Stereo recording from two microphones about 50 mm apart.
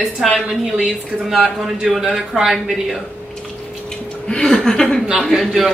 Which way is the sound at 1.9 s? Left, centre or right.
Centre.